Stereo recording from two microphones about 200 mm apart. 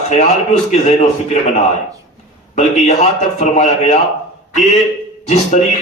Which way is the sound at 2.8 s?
35° left (ahead or behind).